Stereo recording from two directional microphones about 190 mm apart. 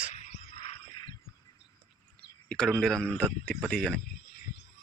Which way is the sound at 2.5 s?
5° left (ahead or behind).